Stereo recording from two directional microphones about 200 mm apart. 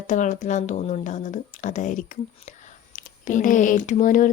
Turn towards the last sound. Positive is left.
turn(degrees=40)  # may be behind; listen again after turning